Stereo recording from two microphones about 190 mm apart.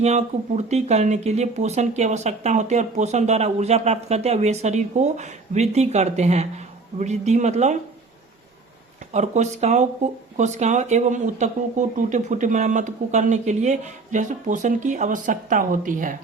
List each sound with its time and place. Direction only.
0.0 s speech: 35° right (ahead or behind)
9.1 s speech: 35° right (ahead or behind)